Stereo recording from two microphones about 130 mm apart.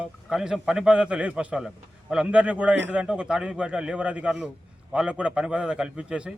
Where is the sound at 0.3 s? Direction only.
5° right (ahead or behind).